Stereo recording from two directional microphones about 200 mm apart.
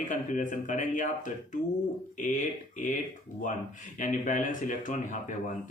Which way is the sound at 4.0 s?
40° left (ahead or behind).